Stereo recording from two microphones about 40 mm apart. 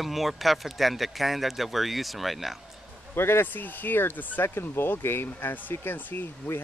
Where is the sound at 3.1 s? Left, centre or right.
Left.